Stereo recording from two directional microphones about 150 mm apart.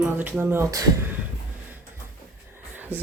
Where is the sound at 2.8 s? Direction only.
15° right (ahead or behind).